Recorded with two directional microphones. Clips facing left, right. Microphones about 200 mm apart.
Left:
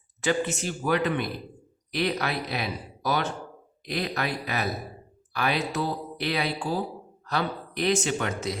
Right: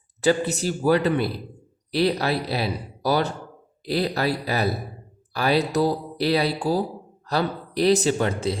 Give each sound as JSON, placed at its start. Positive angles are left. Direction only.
{"t": 0.2, "sound": "speech", "side_deg": -35}